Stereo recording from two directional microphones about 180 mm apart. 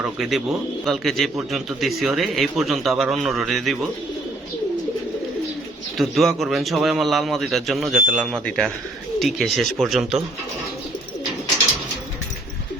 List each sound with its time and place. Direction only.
0.0 s a man's voice: centre (ahead or behind)
6.0 s a man's voice: centre (ahead or behind)